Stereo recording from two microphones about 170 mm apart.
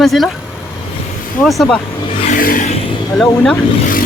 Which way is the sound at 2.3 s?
55° left (ahead or behind).